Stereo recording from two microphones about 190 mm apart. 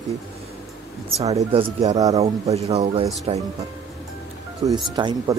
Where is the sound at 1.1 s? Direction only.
35° right (ahead or behind).